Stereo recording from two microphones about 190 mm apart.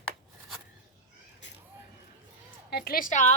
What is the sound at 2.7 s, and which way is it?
Speech, 50° left (ahead or behind).